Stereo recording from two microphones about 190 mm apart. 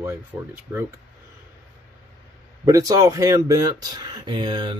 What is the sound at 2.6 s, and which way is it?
Speech, 20° right (ahead or behind).